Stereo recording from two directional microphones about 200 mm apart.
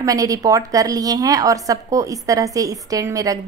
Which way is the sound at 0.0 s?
15° right (ahead or behind).